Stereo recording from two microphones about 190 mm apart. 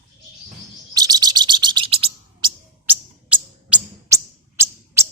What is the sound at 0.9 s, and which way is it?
Bird, 20° right (ahead or behind).